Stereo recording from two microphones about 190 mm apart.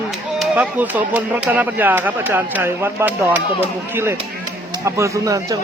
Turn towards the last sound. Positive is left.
turn(degrees=-15)  # may be behind; listen again after turning